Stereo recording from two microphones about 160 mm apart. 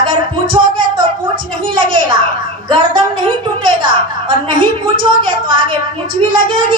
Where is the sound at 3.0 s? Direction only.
30° right (ahead or behind).